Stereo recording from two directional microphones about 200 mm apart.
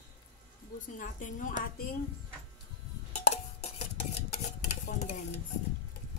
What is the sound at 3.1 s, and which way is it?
Stir, 35° left (ahead or behind).